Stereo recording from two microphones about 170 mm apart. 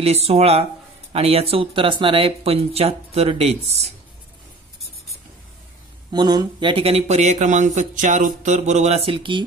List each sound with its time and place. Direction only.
0.0 s speech: 35° right (ahead or behind)
6.1 s speech: 25° right (ahead or behind)